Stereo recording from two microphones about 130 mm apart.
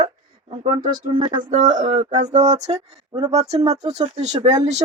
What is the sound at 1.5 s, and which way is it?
Speech, 80° right.